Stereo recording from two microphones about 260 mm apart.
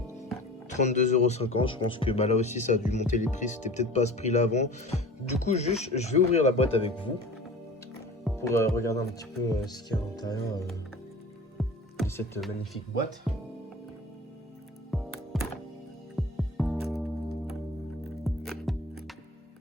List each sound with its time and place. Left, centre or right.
0.7 s speech: left
8.4 s speech: centre
11.5 s music: centre
13.3 s speech: centre
14.8 s music: centre